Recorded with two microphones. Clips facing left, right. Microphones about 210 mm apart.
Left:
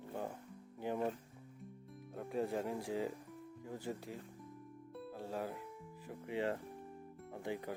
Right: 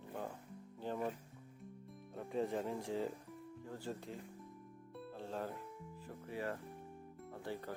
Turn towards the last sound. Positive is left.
turn(degrees=15)  # may be behind; listen again after turning